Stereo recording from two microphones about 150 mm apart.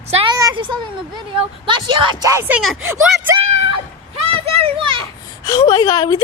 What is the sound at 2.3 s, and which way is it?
Speech, 15° right (ahead or behind).